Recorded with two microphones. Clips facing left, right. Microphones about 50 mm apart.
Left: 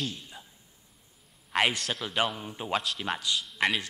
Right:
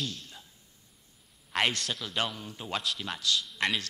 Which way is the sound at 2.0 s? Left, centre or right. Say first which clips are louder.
Left 5 dB; centre.